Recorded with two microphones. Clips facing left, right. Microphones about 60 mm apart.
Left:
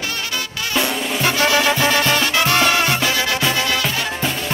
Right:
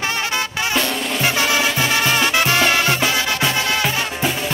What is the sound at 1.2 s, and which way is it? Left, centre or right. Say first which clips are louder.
Music: left 2 dB; centre.